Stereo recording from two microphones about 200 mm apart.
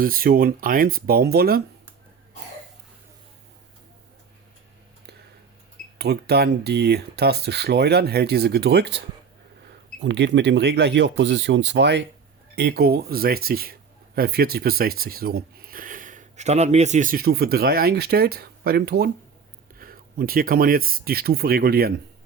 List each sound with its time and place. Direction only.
0.0 s speech: 45° right (ahead or behind)
6.0 s speech: 55° right (ahead or behind)
10.0 s speech: 60° right (ahead or behind)